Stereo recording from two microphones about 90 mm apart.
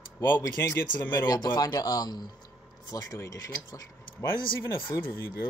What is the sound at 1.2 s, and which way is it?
Speech, 50° left (ahead or behind).